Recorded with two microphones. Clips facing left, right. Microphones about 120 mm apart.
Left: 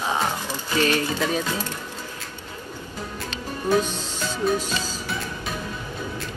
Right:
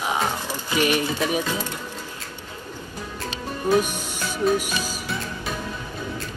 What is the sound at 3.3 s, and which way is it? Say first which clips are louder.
Music: right 1 dB; 15° right (ahead or behind).